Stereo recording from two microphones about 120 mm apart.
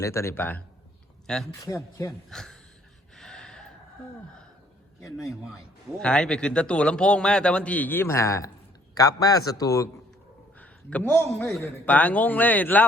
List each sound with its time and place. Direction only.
0.0 s speech: 25° left (ahead or behind)
1.3 s a man's voice: 5° left (ahead or behind)
1.6 s speech: 25° left (ahead or behind)
2.3 s a man's voice: 5° left (ahead or behind)
3.2 s gasp: 5° left (ahead or behind)
5.1 s a man's voice: centre (ahead or behind); by 9.9 s 30° left (ahead or behind)
10.6 s a man's voice: 10° left (ahead or behind)